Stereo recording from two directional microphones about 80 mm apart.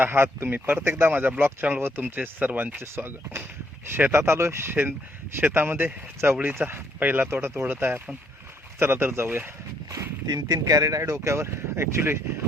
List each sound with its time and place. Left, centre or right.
0.0 s speech: right
10.2 s speech: right